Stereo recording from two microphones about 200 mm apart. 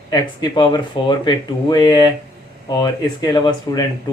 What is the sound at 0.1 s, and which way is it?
Speech, 20° left (ahead or behind).